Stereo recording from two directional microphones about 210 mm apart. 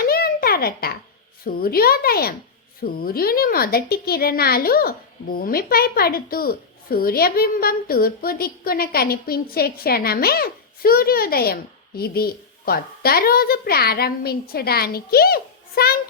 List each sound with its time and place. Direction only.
0.0 s babbling: 45° left (ahead or behind)
1.5 s a woman's voice: 45° left (ahead or behind)